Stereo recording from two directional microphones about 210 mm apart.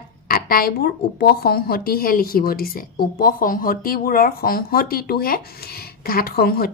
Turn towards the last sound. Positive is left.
turn(degrees=45)  # may be behind; listen again after turning